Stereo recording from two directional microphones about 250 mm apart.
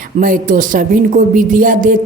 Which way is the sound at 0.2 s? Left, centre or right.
Right.